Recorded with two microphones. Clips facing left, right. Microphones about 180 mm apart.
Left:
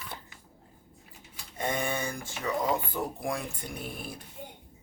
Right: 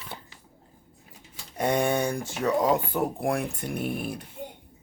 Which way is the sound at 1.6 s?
70° right (ahead or behind).